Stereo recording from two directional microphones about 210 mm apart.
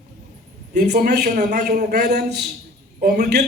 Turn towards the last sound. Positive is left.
turn(degrees=-50)  # may be behind; listen again after turning